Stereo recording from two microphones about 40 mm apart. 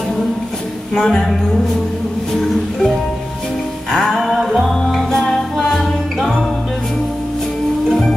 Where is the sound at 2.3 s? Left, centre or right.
Centre.